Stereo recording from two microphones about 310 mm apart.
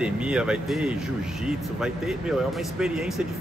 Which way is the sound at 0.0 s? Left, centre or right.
Centre.